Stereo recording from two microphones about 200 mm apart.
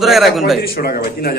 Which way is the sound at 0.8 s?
50° left (ahead or behind).